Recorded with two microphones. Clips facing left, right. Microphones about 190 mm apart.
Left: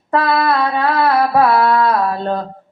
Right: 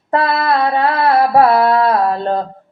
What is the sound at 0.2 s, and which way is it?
Mantra, 25° right (ahead or behind).